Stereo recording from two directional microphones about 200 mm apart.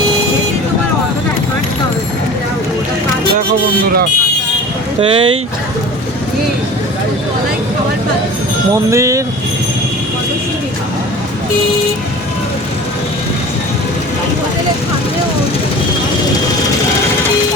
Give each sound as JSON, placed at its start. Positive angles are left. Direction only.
{"t": 4.9, "sound": "speech", "side_deg": -25}
{"t": 8.9, "sound": "speech", "side_deg": -15}